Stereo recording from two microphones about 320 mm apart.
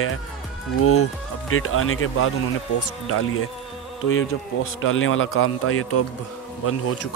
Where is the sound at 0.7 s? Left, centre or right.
Left.